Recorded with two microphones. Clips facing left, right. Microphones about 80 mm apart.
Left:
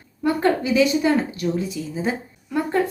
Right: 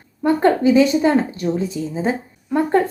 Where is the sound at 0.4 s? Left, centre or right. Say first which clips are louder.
Right 5 dB; right.